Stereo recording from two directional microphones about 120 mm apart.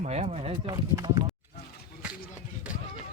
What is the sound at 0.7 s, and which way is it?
Speech, 35° right (ahead or behind).